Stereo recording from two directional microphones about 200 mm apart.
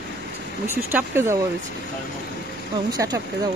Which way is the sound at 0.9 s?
10° right (ahead or behind).